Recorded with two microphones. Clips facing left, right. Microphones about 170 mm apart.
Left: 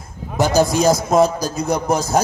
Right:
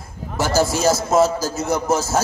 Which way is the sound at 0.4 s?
15° left (ahead or behind).